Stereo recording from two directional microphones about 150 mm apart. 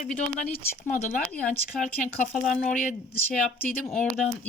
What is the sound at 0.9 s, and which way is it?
Speech, 55° left (ahead or behind).